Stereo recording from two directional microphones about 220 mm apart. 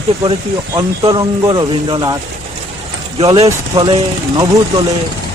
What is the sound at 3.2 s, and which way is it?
Speech, 25° right (ahead or behind).